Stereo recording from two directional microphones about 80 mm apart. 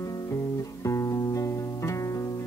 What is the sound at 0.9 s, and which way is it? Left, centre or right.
Music, left.